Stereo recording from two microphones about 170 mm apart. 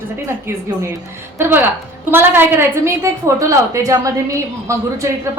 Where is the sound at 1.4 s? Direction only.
10° right (ahead or behind).